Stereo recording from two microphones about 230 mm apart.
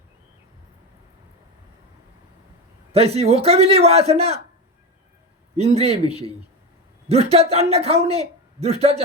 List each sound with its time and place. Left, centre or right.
2.9 s a man's voice: right
5.5 s a man's voice: right